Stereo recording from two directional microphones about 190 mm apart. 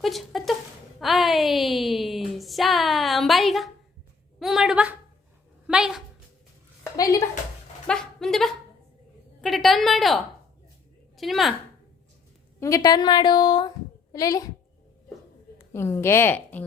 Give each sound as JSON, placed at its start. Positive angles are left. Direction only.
{"t": 0.0, "sound": "a sound", "side_deg": 0}
{"t": 0.9, "sound": "a woman's voice", "side_deg": 0}
{"t": 7.9, "sound": "a sound", "side_deg": 5}
{"t": 9.4, "sound": "a woman's voice", "side_deg": 0}
{"t": 12.5, "sound": "a woman's voice", "side_deg": 15}
{"t": 15.5, "sound": "a woman's voice", "side_deg": 15}